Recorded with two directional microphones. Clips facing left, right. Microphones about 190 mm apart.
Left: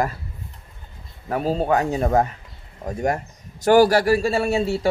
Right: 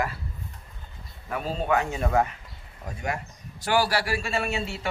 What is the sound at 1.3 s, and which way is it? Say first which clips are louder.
A man's voice: left 6 dB; 40° left (ahead or behind).